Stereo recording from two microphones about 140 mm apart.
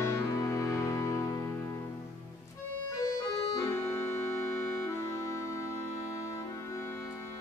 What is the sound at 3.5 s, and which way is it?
Accordion, 20° left (ahead or behind).